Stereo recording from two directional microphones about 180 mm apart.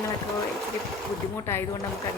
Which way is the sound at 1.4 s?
15° left (ahead or behind).